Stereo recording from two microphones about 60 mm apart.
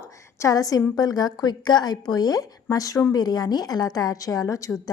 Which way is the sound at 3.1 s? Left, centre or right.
Left.